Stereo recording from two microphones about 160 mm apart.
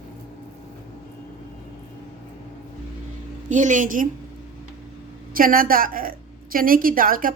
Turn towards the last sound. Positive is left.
turn(degrees=-60)  # may be behind; listen again after turning